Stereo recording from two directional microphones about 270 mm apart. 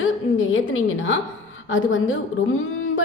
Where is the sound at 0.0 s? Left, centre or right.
Left.